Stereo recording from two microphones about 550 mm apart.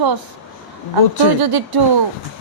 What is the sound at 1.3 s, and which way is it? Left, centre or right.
Speech, right.